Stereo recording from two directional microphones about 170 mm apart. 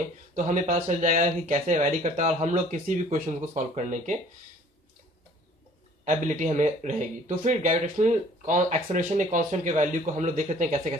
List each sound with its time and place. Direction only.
0.3 s speech: 45° right (ahead or behind)
6.0 s speech: 45° right (ahead or behind)